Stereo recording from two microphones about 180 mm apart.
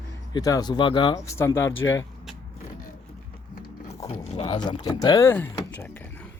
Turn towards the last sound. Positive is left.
turn(degrees=10)  # may be behind; listen again after turning